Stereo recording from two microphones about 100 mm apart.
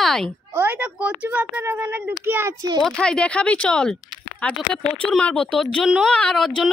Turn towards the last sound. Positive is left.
turn(degrees=5)  # may be behind; listen again after turning